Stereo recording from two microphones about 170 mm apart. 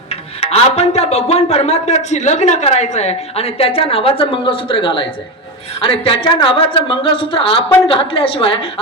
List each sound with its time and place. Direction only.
0.1 s speech: 35° left (ahead or behind)